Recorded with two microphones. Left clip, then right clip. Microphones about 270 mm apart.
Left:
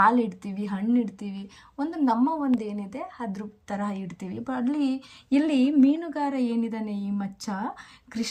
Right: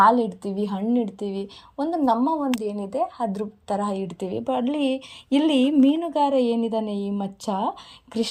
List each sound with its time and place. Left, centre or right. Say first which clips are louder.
0.0 s speech: right 4 dB; centre
5.5 s a woman's voice: right 3 dB; right
6.1 s a woman's voice: right 7 dB; centre